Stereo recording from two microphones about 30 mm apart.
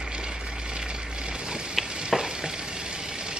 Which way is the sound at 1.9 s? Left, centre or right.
Right.